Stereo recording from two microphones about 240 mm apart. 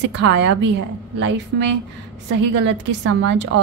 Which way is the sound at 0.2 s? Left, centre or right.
Right.